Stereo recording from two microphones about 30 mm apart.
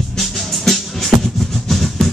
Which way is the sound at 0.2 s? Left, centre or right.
Centre.